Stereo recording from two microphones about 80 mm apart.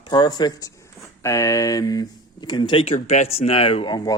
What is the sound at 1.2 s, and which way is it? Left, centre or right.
Speech, left.